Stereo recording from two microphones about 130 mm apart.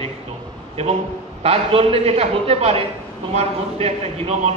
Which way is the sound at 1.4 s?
50° right (ahead or behind).